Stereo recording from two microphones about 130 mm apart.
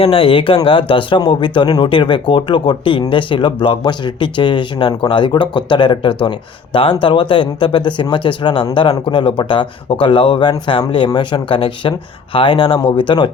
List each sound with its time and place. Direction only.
0.0 s speech: 45° left (ahead or behind)